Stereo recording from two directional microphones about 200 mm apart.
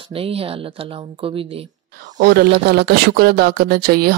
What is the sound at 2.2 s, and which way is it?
Speech, 55° right (ahead or behind).